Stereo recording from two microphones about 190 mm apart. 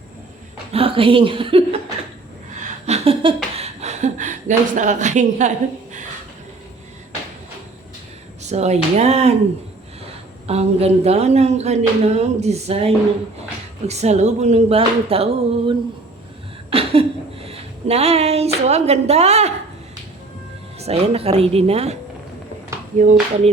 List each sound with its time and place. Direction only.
0.7 s speech: 30° right (ahead or behind)
2.8 s a sound: 30° right (ahead or behind)
8.4 s speech: 35° right (ahead or behind)
10.4 s speech: 35° right (ahead or behind)
16.7 s speech: 30° right (ahead or behind)
20.7 s speech: 30° right (ahead or behind)